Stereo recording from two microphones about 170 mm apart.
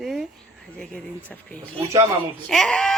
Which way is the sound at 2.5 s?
Centre (ahead or behind).